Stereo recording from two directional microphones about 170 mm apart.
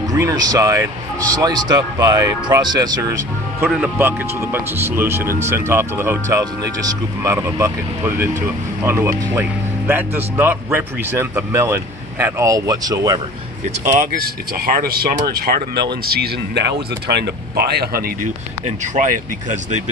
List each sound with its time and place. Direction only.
0.1 s speech: 20° right (ahead or behind)
3.6 s speech: 10° right (ahead or behind)
13.8 s speech: 60° right (ahead or behind)
18.9 s speech: 45° right (ahead or behind)